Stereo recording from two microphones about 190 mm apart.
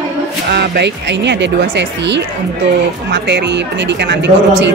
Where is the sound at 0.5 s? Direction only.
60° right (ahead or behind).